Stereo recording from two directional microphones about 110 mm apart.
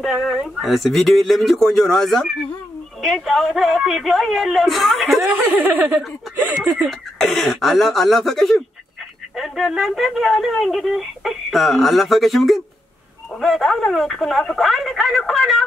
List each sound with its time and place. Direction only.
0.0 s speech: 5° right (ahead or behind)
5.7 s speech: 15° right (ahead or behind)
6.7 s speech: centre (ahead or behind)